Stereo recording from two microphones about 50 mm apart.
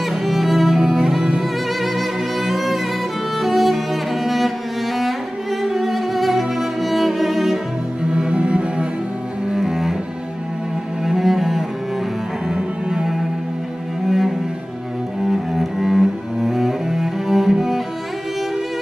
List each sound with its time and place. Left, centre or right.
0.0 s music: centre
5.6 s music: centre
8.1 s music: centre
9.5 s cello: centre
11.1 s cello: centre
12.4 s music: centre
14.0 s cello: centre